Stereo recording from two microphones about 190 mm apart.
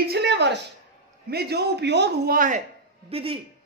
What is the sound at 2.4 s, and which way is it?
Speech, 45° right (ahead or behind).